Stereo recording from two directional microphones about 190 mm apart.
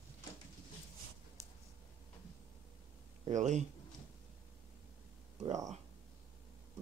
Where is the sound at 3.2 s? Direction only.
40° right (ahead or behind).